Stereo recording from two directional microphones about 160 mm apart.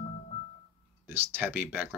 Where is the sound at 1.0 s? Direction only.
15° right (ahead or behind).